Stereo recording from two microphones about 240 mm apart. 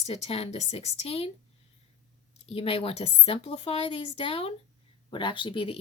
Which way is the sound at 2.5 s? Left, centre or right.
Left.